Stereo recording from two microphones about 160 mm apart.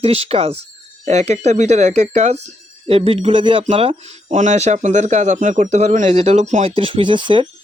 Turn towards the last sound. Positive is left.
turn(degrees=-30)  # may be behind; listen again after turning